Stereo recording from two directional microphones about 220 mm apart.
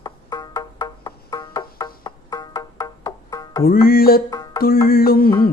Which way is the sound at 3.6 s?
40° left (ahead or behind).